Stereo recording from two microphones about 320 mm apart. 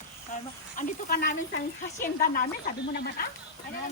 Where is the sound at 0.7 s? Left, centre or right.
Left.